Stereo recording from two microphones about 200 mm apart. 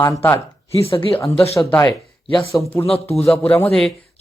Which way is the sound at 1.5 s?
15° left (ahead or behind).